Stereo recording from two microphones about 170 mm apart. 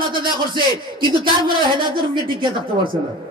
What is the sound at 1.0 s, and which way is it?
Speech, 30° right (ahead or behind).